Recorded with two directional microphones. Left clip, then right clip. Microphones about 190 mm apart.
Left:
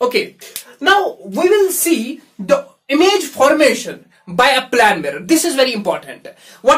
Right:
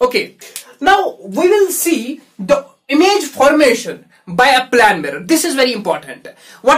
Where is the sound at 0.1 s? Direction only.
15° right (ahead or behind).